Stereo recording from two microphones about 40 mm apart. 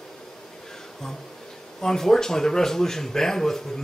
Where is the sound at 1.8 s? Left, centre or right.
Centre.